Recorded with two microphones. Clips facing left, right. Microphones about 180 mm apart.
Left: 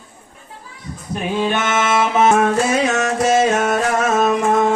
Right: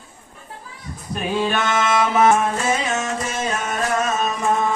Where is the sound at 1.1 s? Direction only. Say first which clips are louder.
Left 2 dB; 20° left (ahead or behind).